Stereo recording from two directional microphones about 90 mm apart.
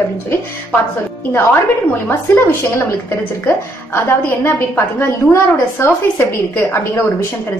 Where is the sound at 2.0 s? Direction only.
25° left (ahead or behind).